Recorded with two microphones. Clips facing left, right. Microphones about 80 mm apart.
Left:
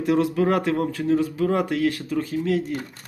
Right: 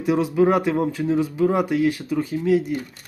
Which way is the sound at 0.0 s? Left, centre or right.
Centre.